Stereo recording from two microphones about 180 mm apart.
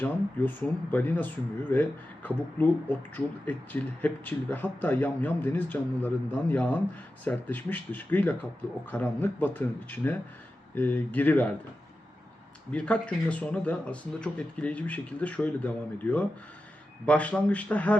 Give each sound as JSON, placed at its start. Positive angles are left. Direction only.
{"t": 0.0, "sound": "speech", "side_deg": 10}
{"t": 12.7, "sound": "speech", "side_deg": 5}